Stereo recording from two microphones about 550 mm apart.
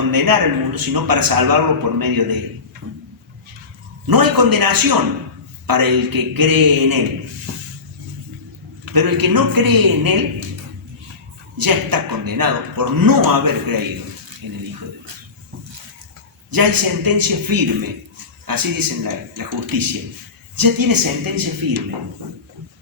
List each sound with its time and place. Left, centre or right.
0.1 s a man's voice: right
4.1 s a man's voice: right
9.0 s a man's voice: right
11.5 s a man's voice: right
16.5 s a man's voice: right